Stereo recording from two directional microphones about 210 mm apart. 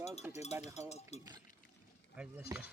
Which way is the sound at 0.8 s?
30° left (ahead or behind).